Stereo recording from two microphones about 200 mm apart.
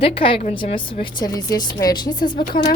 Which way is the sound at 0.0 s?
25° left (ahead or behind).